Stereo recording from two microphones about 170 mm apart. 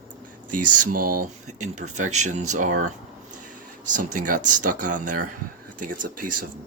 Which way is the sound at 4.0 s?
55° right (ahead or behind).